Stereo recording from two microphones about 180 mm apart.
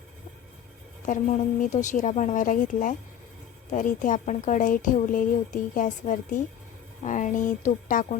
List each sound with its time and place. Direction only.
1.0 s a woman's voice: 45° left (ahead or behind)